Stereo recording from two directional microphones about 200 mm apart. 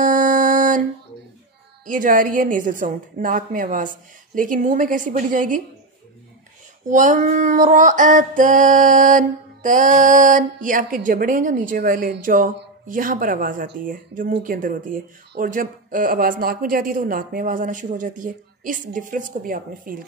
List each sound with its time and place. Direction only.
0.0 s a sound: 40° right (ahead or behind)
1.9 s female singing: 40° right (ahead or behind)
6.9 s female singing: 40° right (ahead or behind)
12.8 s speech: 45° right (ahead or behind)